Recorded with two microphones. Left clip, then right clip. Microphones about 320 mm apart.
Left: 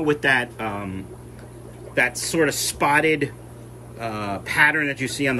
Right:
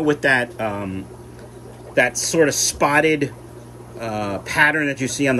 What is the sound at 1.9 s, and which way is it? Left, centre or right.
Speech, centre.